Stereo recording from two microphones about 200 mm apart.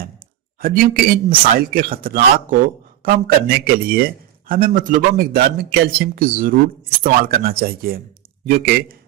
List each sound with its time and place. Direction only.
0.6 s speech: 45° right (ahead or behind)